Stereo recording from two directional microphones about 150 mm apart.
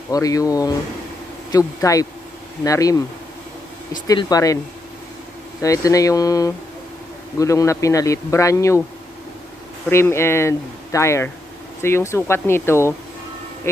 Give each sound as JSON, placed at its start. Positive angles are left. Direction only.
{"t": 0.1, "sound": "speech", "side_deg": 25}
{"t": 4.1, "sound": "speech", "side_deg": 25}
{"t": 5.6, "sound": "speech", "side_deg": 20}
{"t": 9.8, "sound": "speech", "side_deg": 15}